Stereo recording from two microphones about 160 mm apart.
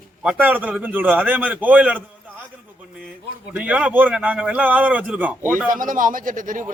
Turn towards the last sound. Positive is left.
turn(degrees=-55)  # may be behind; listen again after turning